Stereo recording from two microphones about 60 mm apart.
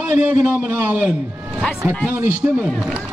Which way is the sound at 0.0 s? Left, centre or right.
Right.